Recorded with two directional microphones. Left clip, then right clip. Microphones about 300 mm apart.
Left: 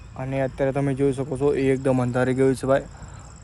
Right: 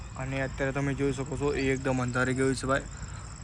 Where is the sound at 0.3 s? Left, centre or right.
Centre.